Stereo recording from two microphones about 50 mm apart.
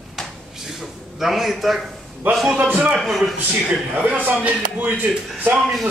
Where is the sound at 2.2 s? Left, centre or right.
Right.